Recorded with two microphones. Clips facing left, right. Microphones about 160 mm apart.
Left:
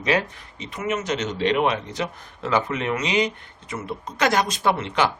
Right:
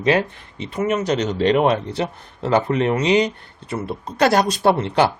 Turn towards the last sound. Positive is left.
turn(degrees=-35)  # may be behind; listen again after turning